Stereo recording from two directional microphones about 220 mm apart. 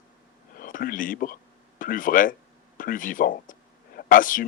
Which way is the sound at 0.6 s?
40° left (ahead or behind).